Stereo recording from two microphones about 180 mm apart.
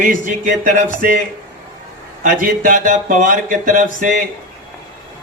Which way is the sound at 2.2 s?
45° right (ahead or behind).